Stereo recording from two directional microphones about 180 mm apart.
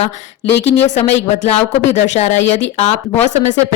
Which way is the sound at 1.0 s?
35° left (ahead or behind).